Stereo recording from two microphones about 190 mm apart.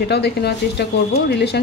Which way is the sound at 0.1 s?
60° left (ahead or behind).